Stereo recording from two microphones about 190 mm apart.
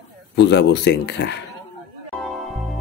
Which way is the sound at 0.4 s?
65° left (ahead or behind).